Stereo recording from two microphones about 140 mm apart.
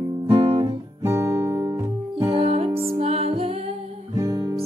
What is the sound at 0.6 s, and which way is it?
Guitar, 20° right (ahead or behind).